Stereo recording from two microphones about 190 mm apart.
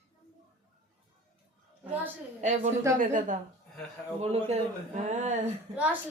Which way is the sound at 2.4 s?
40° right (ahead or behind).